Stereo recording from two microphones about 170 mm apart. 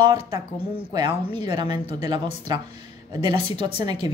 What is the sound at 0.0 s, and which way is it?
Speech, 25° right (ahead or behind).